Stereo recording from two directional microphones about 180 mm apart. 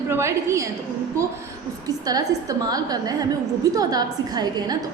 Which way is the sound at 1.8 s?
20° right (ahead or behind).